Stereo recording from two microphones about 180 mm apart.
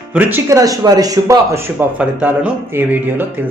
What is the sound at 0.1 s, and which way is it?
Speech, 10° right (ahead or behind).